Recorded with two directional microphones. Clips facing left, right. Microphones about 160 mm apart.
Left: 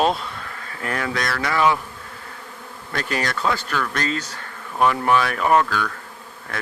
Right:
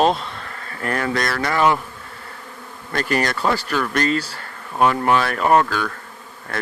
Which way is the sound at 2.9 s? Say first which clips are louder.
Right 4 dB; centre (ahead or behind).